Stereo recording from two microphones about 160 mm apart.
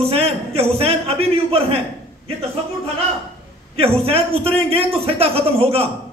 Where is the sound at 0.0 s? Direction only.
40° right (ahead or behind).